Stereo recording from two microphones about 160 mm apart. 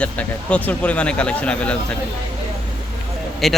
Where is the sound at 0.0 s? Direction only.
10° left (ahead or behind).